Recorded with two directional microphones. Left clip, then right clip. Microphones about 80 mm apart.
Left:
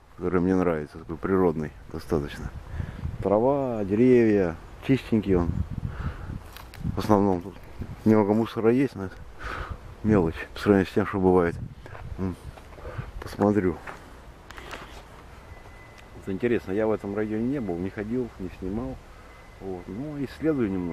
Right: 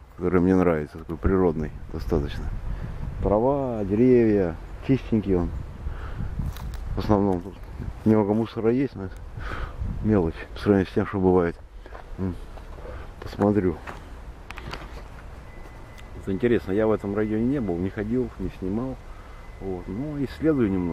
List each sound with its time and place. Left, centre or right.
0.2 s speech: centre
1.2 s speech: left
3.4 s speech: left
7.0 s speech: left
10.0 s speech: left
12.9 s a sound: left
16.3 s speech: centre
19.6 s speech: centre